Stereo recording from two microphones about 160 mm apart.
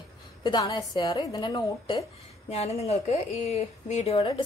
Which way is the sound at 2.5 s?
40° left (ahead or behind).